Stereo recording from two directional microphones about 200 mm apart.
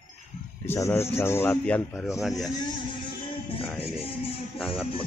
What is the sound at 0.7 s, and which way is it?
Speech, 15° left (ahead or behind).